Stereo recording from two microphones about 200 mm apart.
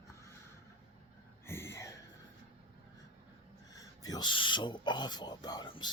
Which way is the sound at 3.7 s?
20° left (ahead or behind).